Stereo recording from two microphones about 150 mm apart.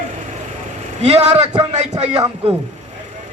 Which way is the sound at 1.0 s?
45° right (ahead or behind).